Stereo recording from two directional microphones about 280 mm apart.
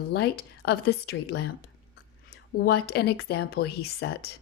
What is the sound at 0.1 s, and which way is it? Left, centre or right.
A woman's voice, left.